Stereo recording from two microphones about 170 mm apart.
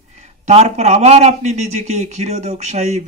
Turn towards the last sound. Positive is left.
turn(degrees=-40)  # may be behind; listen again after turning